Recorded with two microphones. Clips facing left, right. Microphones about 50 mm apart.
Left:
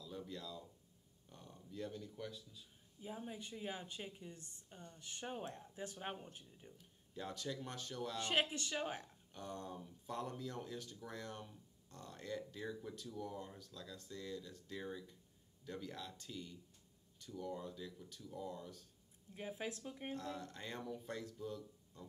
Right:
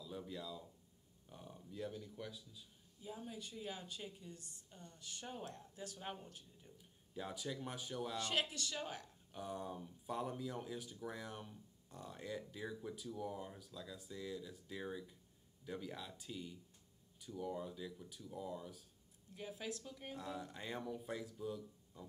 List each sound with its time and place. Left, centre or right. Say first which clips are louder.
0.0 s a sound: right 1 dB; centre
1.3 s speech: right 1 dB; centre
3.0 s a woman's voice: left 1 dB; left
6.8 s speech: right 1 dB; centre
8.2 s a woman's voice: left 4 dB; left
9.3 s speech: right 2 dB; centre
19.3 s a woman's voice: left 1 dB; left
20.2 s speech: even; centre